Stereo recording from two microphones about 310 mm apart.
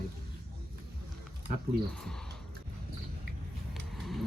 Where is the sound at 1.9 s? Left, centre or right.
Centre.